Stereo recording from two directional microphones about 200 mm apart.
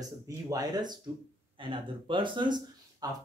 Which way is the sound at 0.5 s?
20° right (ahead or behind).